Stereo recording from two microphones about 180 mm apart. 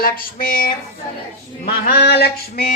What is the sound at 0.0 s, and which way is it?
Speech, 50° left (ahead or behind).